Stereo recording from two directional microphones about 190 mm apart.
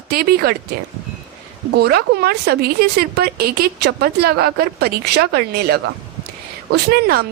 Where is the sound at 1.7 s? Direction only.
55° right (ahead or behind).